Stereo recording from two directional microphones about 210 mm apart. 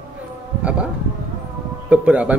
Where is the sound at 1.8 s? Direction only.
5° right (ahead or behind).